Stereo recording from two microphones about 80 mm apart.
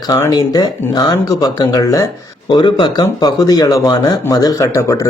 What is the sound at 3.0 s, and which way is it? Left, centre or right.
Speech, left.